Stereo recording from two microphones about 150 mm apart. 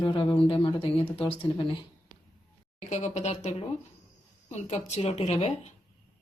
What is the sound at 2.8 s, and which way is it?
Speech, 50° left (ahead or behind).